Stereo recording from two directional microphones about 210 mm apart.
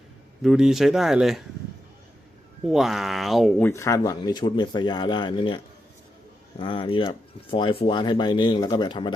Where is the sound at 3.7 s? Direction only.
15° left (ahead or behind).